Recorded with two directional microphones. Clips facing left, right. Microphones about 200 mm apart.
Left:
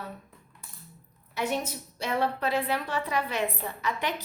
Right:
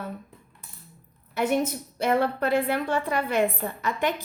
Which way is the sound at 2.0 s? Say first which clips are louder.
Right 5 dB; 55° right (ahead or behind).